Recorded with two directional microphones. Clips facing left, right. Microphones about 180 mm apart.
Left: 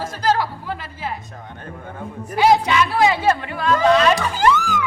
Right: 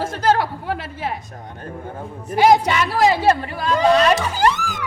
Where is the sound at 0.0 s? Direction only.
55° right (ahead or behind).